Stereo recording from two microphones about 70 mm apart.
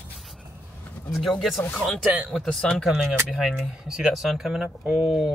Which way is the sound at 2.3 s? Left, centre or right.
Centre.